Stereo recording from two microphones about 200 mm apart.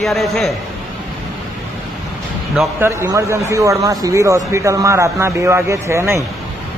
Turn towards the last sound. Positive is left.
turn(degrees=-15)  # may be behind; listen again after turning